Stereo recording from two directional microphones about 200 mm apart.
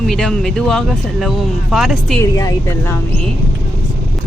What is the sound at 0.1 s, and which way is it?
Speech, 5° left (ahead or behind).